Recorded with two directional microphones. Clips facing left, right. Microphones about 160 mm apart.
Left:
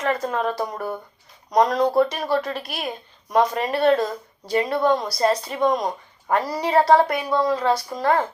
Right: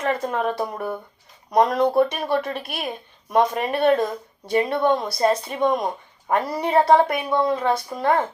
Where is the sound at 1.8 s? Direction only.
25° right (ahead or behind).